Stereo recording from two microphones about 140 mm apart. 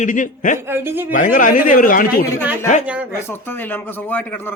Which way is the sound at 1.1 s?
70° left (ahead or behind).